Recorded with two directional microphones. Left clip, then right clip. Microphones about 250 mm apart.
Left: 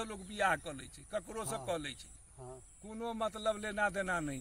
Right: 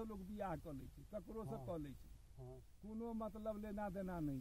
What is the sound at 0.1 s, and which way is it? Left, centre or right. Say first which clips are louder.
Speech: left 14 dB; centre.